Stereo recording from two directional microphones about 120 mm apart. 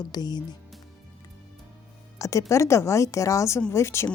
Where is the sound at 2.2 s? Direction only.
25° left (ahead or behind).